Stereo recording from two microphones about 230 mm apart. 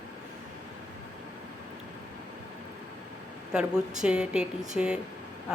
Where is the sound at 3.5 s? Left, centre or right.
Centre.